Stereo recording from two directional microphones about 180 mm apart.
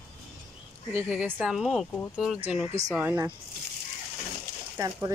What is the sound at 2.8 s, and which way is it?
Speech, 15° right (ahead or behind).